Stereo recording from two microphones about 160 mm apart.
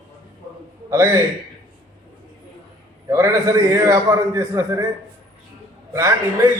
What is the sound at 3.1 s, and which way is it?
A man's voice, 20° right (ahead or behind).